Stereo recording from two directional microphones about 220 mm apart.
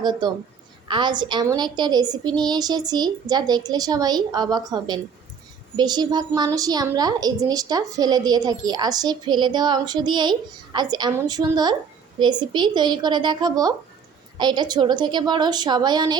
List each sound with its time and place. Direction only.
0.0 s a woman's voice: 20° right (ahead or behind)